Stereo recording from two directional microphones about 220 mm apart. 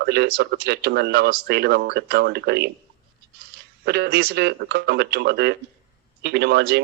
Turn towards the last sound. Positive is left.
turn(degrees=-50)  # may be behind; listen again after turning